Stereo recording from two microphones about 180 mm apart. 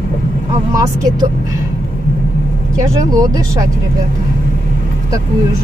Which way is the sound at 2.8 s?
20° right (ahead or behind).